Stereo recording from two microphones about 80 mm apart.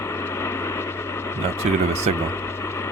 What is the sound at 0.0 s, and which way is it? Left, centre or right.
Vehicle, left.